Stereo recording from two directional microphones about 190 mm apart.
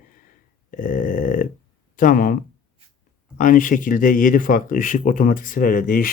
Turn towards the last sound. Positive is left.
turn(degrees=45)  # may be behind; listen again after turning